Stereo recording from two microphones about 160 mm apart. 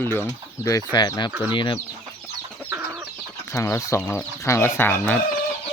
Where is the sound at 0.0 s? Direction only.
15° left (ahead or behind); by 1.8 s 30° left (ahead or behind).